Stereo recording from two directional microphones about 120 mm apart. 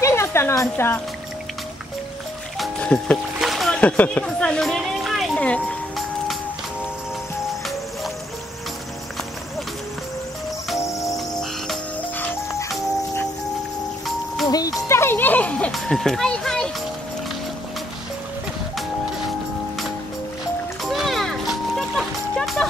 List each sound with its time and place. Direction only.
0.0 s a sound: 20° left (ahead or behind)
2.8 s speech: 10° left (ahead or behind)
3.3 s a sound: centre (ahead or behind)
5.4 s speech: 10° left (ahead or behind)
11.0 s cricket: centre (ahead or behind)
12.2 s music: 25° left (ahead or behind)
14.0 s music: centre (ahead or behind)
14.5 s music: 30° left (ahead or behind); by 16.7 s 5° left (ahead or behind)
20.8 s music: centre (ahead or behind)